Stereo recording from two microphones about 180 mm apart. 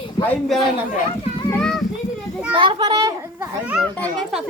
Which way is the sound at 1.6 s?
Centre (ahead or behind).